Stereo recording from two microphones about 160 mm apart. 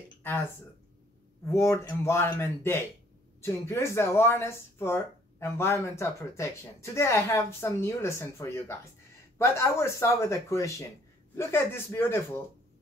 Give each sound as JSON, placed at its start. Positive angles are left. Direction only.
{"t": 0.2, "sound": "speech", "side_deg": 15}
{"t": 1.5, "sound": "speech", "side_deg": 20}